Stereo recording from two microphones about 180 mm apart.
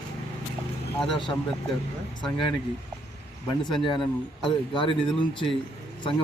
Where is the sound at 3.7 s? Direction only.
25° left (ahead or behind).